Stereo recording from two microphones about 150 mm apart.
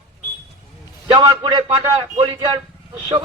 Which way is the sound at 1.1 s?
30° right (ahead or behind).